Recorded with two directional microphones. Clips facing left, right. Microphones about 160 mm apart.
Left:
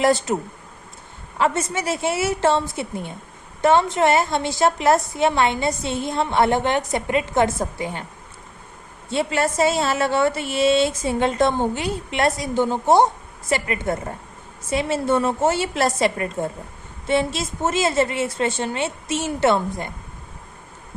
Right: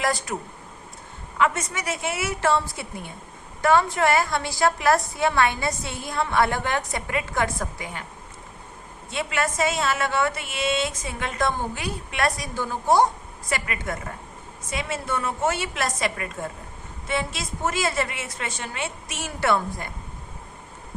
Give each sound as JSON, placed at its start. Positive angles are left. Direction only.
{"t": 0.0, "sound": "a woman's voice", "side_deg": 25}
{"t": 1.4, "sound": "a woman's voice", "side_deg": 30}
{"t": 9.0, "sound": "a woman's voice", "side_deg": 30}